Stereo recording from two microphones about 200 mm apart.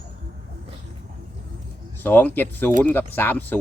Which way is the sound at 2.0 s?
10° left (ahead or behind).